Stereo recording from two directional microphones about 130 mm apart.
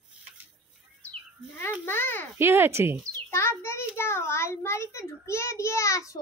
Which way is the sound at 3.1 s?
20° left (ahead or behind).